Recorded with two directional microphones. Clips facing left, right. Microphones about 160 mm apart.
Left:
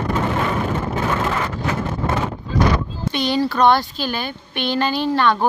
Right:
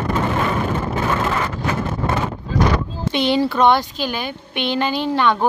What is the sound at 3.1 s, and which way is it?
Speech, 20° right (ahead or behind).